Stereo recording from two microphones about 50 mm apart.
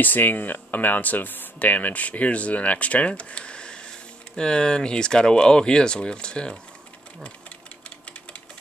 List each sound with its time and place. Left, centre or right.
0.0 s speech: left; by 6.5 s centre